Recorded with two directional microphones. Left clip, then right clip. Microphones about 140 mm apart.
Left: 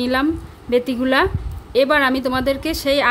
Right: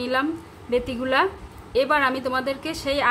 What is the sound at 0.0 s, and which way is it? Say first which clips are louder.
A woman's voice: left 5 dB; 55° left (ahead or behind).